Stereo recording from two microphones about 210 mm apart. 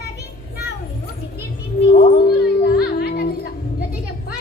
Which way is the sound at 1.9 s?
45° left (ahead or behind).